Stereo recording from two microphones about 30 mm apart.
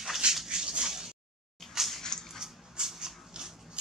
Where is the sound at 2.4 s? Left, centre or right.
Centre.